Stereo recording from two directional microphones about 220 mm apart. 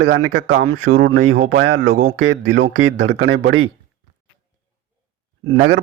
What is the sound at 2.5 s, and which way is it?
Speech, 50° right (ahead or behind).